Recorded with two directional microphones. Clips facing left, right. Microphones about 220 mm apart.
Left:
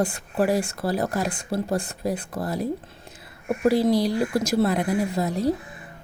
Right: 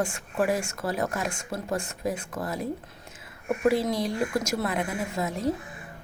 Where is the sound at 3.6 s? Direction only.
35° left (ahead or behind).